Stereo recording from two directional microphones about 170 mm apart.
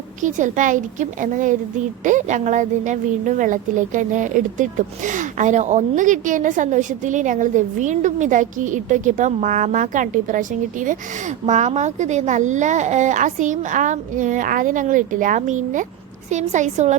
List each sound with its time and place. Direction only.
0.2 s a woman's voice: 45° right (ahead or behind)